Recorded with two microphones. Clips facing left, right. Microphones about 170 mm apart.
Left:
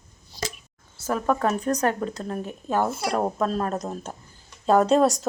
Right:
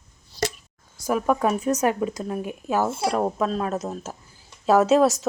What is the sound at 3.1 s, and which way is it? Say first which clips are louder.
Speech: right 1 dB; centre (ahead or behind).